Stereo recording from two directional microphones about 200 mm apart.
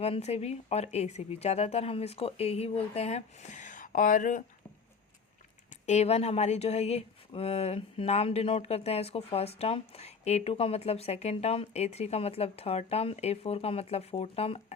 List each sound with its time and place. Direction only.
0.0 s speech: 30° left (ahead or behind)
5.8 s speech: 35° left (ahead or behind)